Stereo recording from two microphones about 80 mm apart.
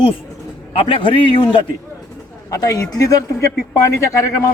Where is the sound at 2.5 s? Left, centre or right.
Left.